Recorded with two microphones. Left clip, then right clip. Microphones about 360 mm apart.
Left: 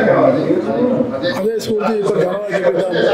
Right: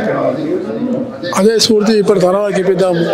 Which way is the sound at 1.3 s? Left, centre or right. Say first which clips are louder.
Right 7 dB; right.